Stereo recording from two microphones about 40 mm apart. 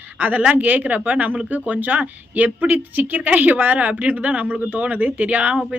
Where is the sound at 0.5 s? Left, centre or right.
Right.